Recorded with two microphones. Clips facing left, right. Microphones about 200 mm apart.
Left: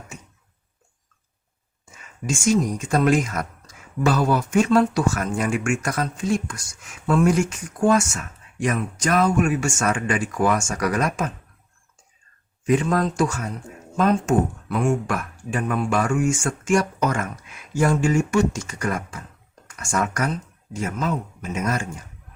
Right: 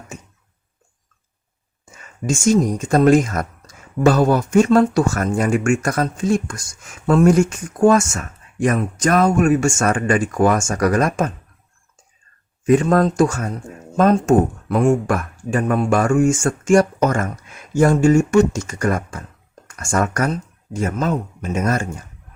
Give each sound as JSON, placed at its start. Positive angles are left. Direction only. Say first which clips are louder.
{"t": 2.3, "sound": "speech", "louder": "right 4 dB", "side_deg": -40}
{"t": 12.6, "sound": "speech", "louder": "right 6 dB", "side_deg": -45}